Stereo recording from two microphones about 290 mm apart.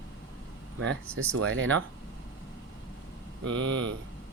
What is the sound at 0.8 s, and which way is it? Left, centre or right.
Speech, right.